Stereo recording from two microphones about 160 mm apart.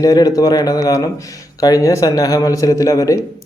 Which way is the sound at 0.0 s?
25° left (ahead or behind).